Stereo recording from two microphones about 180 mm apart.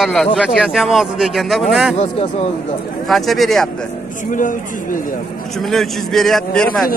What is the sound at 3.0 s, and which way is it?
Speech, centre (ahead or behind).